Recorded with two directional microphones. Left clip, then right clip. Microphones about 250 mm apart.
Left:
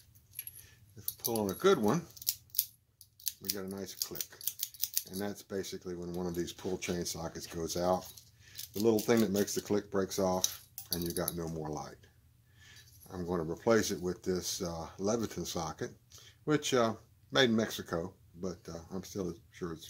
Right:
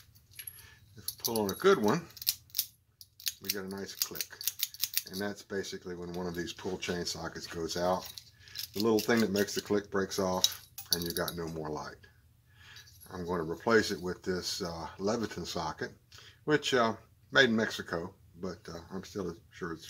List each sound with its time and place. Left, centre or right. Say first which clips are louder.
1.2 s speech: right 2 dB; left
3.5 s speech: right 2 dB; left
4.4 s scissors: right 8 dB; centre
5.1 s speech: right 2 dB; left
9.0 s speech: right 1 dB; left
13.3 s speech: right 2 dB; left